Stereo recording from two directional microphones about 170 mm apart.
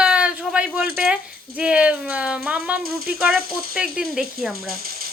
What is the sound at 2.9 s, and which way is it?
Speech, 60° right (ahead or behind).